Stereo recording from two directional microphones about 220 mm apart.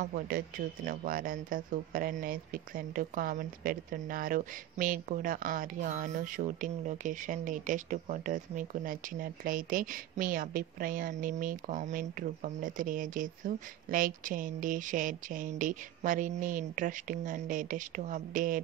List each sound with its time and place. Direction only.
0.0 s speech: 40° right (ahead or behind)